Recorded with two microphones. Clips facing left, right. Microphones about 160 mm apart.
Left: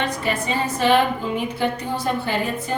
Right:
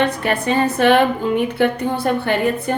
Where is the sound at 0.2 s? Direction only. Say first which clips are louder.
Right 5 dB; 60° right (ahead or behind).